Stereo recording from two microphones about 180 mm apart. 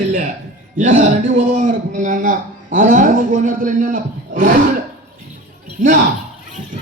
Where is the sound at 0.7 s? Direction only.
45° right (ahead or behind).